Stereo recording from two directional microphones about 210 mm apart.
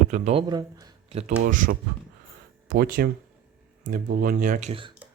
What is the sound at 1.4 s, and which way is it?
Speech, 40° right (ahead or behind).